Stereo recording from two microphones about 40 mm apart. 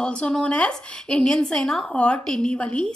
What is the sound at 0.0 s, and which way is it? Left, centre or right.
A woman's voice, left.